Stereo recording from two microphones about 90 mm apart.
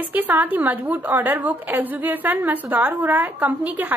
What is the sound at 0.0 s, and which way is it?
A woman's voice, 20° right (ahead or behind).